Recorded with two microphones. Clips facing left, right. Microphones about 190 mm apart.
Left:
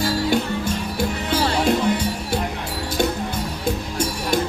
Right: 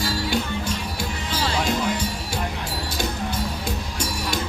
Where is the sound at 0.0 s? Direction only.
50° left (ahead or behind).